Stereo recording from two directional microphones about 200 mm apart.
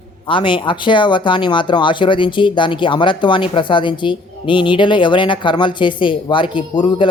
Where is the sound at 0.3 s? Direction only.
25° left (ahead or behind).